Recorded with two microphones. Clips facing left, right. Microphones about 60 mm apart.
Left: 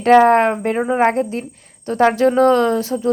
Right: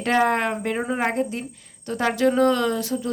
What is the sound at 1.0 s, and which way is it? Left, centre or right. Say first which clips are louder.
Speech: left 7 dB; left.